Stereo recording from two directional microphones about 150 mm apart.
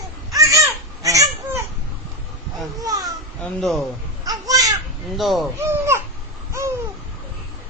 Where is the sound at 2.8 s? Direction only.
25° right (ahead or behind).